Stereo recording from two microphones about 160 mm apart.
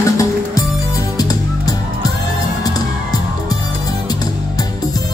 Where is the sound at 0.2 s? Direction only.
20° left (ahead or behind).